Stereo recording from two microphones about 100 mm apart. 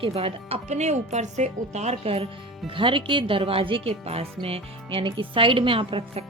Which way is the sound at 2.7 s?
60° right (ahead or behind).